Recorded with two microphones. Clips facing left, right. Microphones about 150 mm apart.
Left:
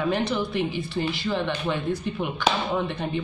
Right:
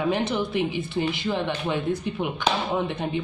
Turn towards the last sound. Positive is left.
turn(degrees=-15)  # may be behind; listen again after turning